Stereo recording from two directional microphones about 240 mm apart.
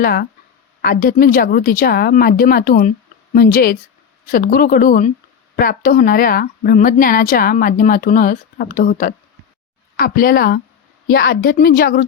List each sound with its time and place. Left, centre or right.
0.0 s a woman's voice: left